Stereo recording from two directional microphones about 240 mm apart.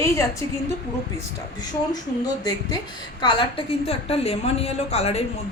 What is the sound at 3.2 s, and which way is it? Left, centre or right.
A woman's voice, centre.